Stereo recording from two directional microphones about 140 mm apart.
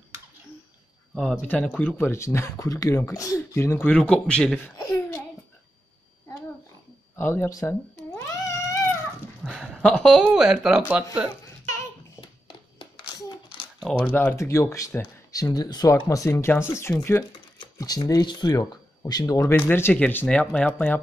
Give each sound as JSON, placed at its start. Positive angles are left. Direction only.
{"t": 1.1, "sound": "speech", "side_deg": 0}
{"t": 1.5, "sound": "speech", "side_deg": 10}
{"t": 4.7, "sound": "laughter", "side_deg": 25}
{"t": 7.2, "sound": "speech", "side_deg": 15}
{"t": 8.3, "sound": "cat", "side_deg": 20}
{"t": 9.5, "sound": "speech", "side_deg": 0}
{"t": 12.2, "sound": "a sound", "side_deg": 35}
{"t": 13.7, "sound": "speech", "side_deg": 5}
{"t": 17.6, "sound": "speech", "side_deg": 30}
{"t": 19.5, "sound": "speech", "side_deg": 15}